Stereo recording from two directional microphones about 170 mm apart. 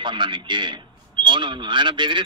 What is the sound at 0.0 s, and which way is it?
A man's voice, 30° right (ahead or behind).